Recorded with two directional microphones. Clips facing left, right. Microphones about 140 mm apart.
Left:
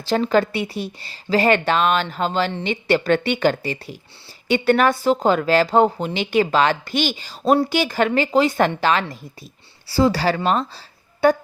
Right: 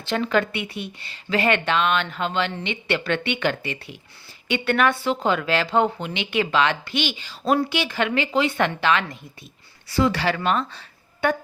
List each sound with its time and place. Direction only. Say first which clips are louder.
0.0 s a woman's voice: left 4 dB; 35° left (ahead or behind)